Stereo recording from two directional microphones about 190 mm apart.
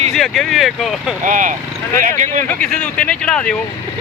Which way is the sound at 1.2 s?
45° right (ahead or behind).